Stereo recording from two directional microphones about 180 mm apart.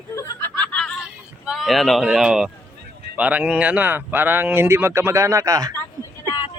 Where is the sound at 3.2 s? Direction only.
5° right (ahead or behind).